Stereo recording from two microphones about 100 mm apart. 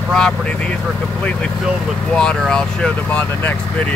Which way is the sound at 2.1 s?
10° left (ahead or behind).